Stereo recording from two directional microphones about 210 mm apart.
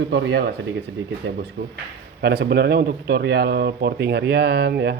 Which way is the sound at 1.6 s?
50° right (ahead or behind).